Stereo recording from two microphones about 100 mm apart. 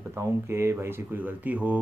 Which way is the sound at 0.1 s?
30° right (ahead or behind).